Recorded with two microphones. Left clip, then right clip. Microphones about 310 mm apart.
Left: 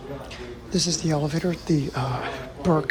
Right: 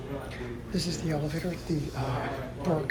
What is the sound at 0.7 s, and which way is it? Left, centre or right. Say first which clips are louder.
A woman's voice: left 8 dB; centre.